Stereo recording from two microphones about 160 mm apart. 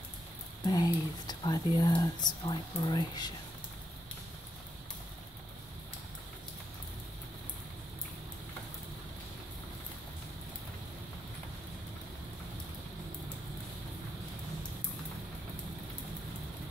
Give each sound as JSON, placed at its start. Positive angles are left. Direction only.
{"t": 0.7, "sound": "speech", "side_deg": 25}